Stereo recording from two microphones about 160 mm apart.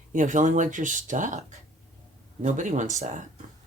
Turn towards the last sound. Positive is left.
turn(degrees=-50)  # may be behind; listen again after turning